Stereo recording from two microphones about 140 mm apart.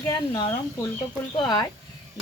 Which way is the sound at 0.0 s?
30° left (ahead or behind).